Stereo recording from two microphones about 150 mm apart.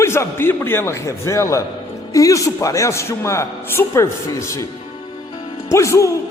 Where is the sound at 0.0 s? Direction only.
15° left (ahead or behind).